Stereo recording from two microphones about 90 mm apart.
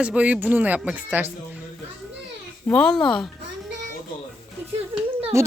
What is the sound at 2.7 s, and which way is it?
Speech, 10° left (ahead or behind).